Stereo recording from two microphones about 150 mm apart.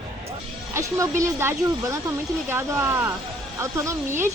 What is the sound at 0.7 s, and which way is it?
A woman's voice, 20° right (ahead or behind).